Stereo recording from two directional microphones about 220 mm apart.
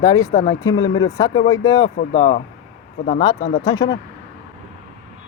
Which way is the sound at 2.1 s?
30° left (ahead or behind).